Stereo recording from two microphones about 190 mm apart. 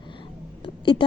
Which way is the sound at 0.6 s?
25° left (ahead or behind).